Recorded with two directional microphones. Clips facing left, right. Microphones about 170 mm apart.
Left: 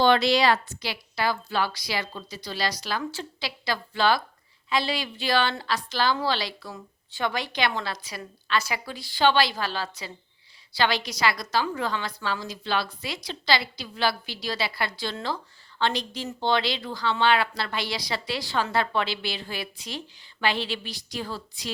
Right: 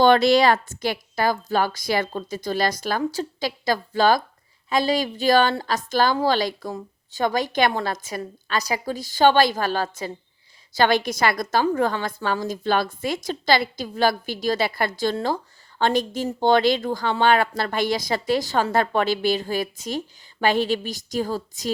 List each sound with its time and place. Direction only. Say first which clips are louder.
0.0 s a woman's voice: right 5 dB; 50° right (ahead or behind)
3.0 s a woman's voice: right 8 dB; 40° right (ahead or behind)